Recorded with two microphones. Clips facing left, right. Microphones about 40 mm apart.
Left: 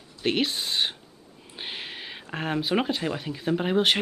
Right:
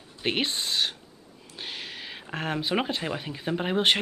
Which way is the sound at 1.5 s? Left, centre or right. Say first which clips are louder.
Left 1 dB; left.